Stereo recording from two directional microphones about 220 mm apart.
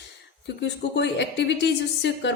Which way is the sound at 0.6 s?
55° left (ahead or behind).